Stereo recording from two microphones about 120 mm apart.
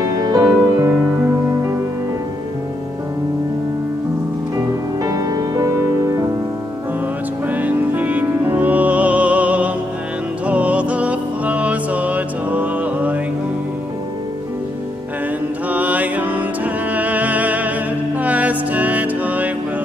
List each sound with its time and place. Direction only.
0.0 s music: 30° right (ahead or behind)
5.0 s music: 30° right (ahead or behind)
7.4 s music: 15° right (ahead or behind)
15.7 s music: 15° right (ahead or behind)